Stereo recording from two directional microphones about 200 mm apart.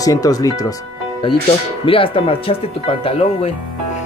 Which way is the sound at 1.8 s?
25° left (ahead or behind).